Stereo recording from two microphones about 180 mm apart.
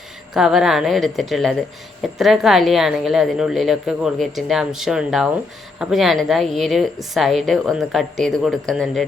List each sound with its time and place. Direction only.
0.3 s speech: 5° right (ahead or behind)